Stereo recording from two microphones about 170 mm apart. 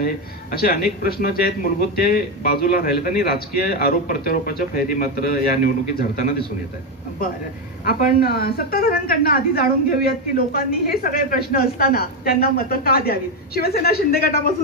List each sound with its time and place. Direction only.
0.0 s a woman's voice: 60° left (ahead or behind)
7.8 s a woman's voice: 60° left (ahead or behind)